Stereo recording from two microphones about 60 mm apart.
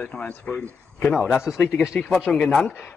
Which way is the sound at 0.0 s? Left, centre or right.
Centre.